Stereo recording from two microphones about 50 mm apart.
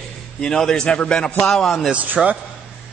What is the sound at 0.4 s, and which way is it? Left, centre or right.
Speech, centre.